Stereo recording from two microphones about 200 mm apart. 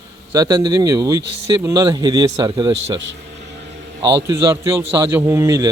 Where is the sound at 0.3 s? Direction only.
20° right (ahead or behind).